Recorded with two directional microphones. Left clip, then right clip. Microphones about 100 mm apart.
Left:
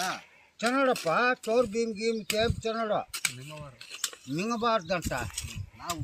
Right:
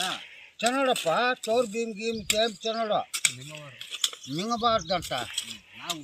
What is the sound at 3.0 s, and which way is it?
Speech, 15° left (ahead or behind).